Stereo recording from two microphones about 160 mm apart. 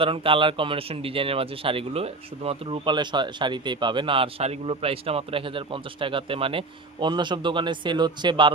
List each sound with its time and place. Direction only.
0.0 s speech: 35° right (ahead or behind)